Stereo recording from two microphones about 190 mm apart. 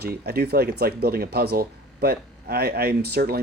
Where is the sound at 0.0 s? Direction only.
55° right (ahead or behind).